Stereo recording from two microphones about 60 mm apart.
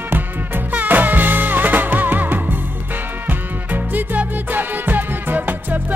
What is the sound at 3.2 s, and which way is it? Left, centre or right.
Music, right.